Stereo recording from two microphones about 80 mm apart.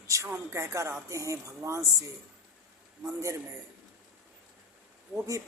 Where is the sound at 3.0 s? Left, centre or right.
Right.